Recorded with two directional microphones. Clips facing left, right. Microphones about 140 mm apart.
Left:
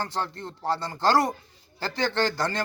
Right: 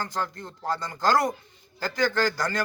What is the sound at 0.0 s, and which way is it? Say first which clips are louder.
Speech: left 1 dB; 30° left (ahead or behind).